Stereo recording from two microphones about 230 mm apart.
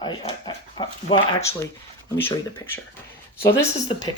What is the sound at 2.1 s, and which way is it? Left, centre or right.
Speech, centre.